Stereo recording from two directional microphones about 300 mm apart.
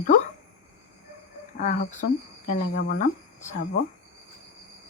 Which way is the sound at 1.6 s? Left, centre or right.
Left.